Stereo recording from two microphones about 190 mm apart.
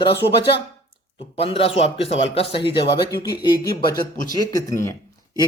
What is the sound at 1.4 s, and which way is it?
A man's voice, 30° left (ahead or behind).